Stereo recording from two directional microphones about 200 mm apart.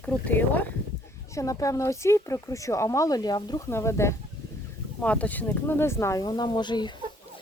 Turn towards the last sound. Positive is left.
turn(degrees=20)  # may be behind; listen again after turning